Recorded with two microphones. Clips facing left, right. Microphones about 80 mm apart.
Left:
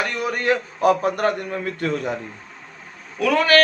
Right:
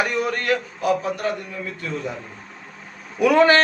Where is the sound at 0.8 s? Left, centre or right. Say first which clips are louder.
Left 4 dB; left.